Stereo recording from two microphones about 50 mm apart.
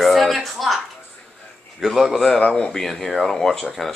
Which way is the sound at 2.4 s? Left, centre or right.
Left.